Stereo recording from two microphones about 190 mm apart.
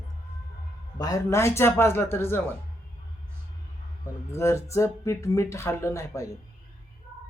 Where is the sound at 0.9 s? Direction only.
20° left (ahead or behind).